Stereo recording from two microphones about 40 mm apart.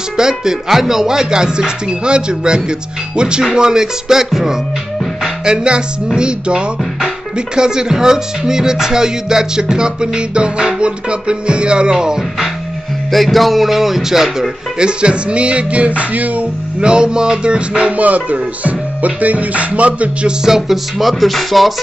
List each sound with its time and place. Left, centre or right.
0.2 s music: centre
5.4 s music: right
13.1 s speech: centre
14.8 s music: right
16.8 s music: right
17.9 s music: right
20.4 s speech: centre